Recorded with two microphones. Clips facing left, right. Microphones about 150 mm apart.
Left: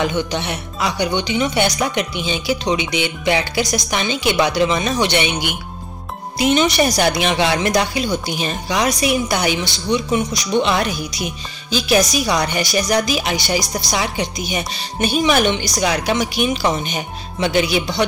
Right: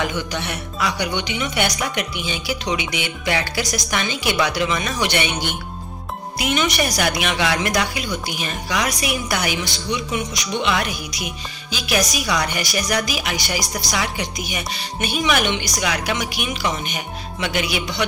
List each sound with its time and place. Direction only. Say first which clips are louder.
0.0 s speech: left 4 dB; 25° left (ahead or behind)
6.3 s speech: left 6 dB; 30° left (ahead or behind)